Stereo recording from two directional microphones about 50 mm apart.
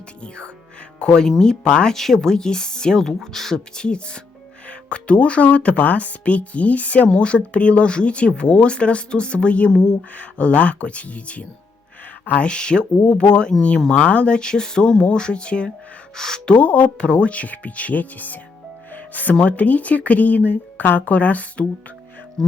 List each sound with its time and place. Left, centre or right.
0.2 s speech: left
12.5 s speech: centre
16.1 s speech: centre
16.5 s speech: left
22.4 s speech: centre